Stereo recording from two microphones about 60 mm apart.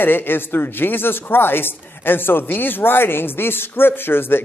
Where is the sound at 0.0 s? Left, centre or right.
Left.